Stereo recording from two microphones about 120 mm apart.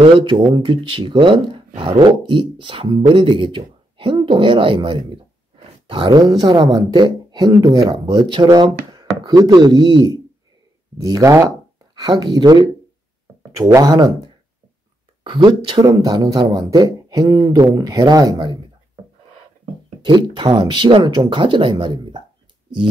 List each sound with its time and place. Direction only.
0.0 s speech: 45° right (ahead or behind); by 7.9 s 25° right (ahead or behind)
7.9 s speech: 40° right (ahead or behind)
20.0 s speech: 40° right (ahead or behind)